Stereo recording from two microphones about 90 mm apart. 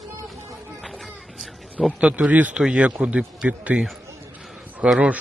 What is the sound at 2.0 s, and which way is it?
Speech, 15° right (ahead or behind).